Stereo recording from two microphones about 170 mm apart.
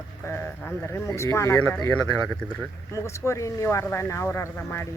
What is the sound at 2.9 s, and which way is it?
Speech, 15° left (ahead or behind).